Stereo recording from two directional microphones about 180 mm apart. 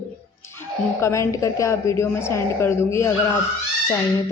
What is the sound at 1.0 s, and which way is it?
A woman's voice, 15° left (ahead or behind).